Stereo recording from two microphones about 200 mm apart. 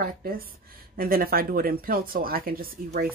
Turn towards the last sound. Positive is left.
turn(degrees=-50)  # may be behind; listen again after turning